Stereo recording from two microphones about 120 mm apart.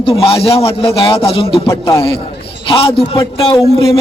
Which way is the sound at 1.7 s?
25° left (ahead or behind).